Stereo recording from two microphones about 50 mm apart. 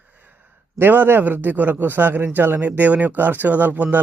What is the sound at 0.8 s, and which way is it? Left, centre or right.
A man's voice, right.